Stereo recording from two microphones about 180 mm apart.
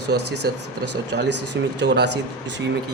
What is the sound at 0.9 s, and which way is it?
Speech, 75° right (ahead or behind).